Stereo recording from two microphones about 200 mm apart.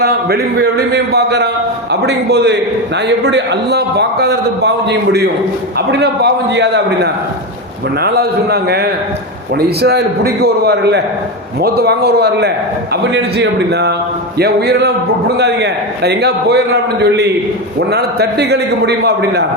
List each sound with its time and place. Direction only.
0.0 s a man's voice: 55° right (ahead or behind)